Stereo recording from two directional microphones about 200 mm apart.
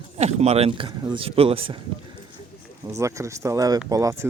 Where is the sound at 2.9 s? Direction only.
15° right (ahead or behind).